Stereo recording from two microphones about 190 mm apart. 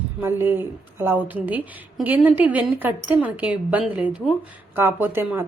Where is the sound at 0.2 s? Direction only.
10° right (ahead or behind).